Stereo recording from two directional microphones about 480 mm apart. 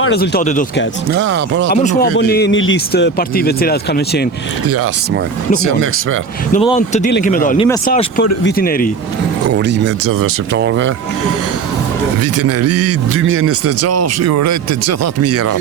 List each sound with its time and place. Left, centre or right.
0.0 s speech: centre
1.1 s a man's voice: right
1.7 s speech: centre
6.5 s speech: centre
9.5 s a man's voice: right
12.2 s a man's voice: right